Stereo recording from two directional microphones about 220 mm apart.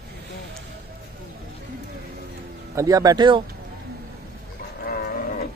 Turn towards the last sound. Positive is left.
turn(degrees=40)  # may be behind; listen again after turning